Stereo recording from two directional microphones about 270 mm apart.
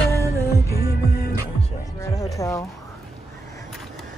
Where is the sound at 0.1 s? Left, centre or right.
Centre.